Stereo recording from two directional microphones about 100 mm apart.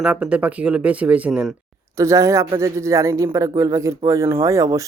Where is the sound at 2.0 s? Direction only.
30° right (ahead or behind).